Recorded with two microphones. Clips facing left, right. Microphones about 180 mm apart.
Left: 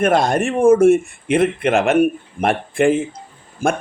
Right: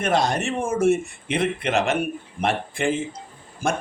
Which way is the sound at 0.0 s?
55° left (ahead or behind).